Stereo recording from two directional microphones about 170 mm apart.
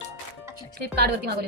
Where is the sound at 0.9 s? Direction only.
70° right (ahead or behind).